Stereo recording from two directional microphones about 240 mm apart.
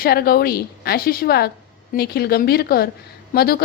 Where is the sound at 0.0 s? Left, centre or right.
Left.